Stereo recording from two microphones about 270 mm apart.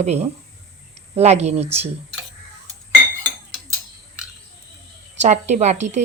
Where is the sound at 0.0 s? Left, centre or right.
Right.